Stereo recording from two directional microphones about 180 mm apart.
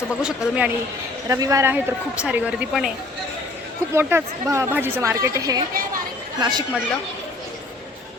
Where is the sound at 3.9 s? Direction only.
15° right (ahead or behind).